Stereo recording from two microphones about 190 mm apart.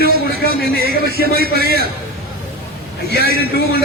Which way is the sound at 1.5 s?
55° left (ahead or behind).